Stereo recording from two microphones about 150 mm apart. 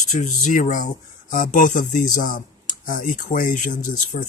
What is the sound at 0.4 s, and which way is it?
Speech, 60° left (ahead or behind).